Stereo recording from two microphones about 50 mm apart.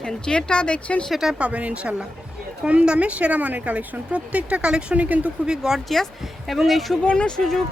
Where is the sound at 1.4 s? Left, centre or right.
Right.